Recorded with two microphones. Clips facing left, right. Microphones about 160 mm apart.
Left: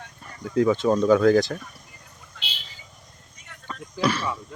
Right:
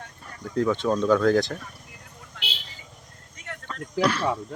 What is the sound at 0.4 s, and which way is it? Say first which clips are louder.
Speech: left 3 dB; 5° left (ahead or behind).